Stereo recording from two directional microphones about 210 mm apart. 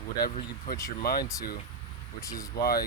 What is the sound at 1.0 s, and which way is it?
Speech, 45° left (ahead or behind).